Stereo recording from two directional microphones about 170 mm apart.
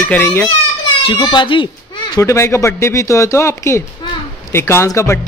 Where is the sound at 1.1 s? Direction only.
30° left (ahead or behind).